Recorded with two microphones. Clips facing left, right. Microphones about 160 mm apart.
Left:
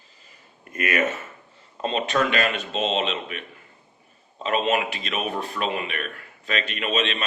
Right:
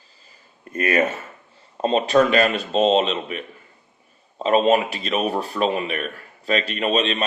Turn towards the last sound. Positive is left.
turn(degrees=-35)  # may be behind; listen again after turning